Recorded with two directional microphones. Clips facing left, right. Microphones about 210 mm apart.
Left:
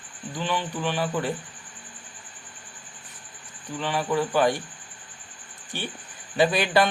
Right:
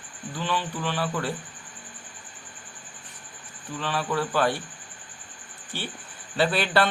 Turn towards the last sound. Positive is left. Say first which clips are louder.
# left 2 dB
turn(degrees=15)  # may be behind; listen again after turning